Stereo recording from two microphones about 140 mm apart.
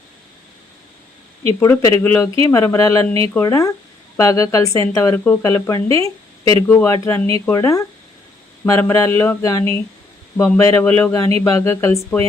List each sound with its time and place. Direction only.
1.5 s speech: 20° left (ahead or behind)